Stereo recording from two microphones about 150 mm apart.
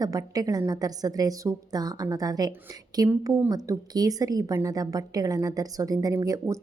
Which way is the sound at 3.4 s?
25° right (ahead or behind).